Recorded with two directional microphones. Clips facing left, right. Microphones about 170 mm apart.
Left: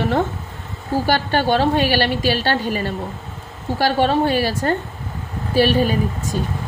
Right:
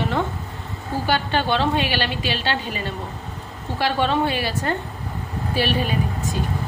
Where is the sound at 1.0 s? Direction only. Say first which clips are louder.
Left 3 dB; 40° left (ahead or behind).